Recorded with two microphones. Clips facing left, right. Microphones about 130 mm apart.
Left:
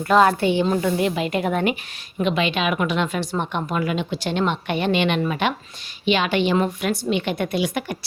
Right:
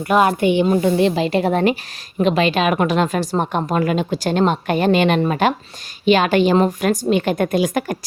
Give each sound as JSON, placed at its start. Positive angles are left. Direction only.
{"t": 0.1, "sound": "a woman's voice", "side_deg": -15}
{"t": 0.9, "sound": "a woman's voice", "side_deg": -30}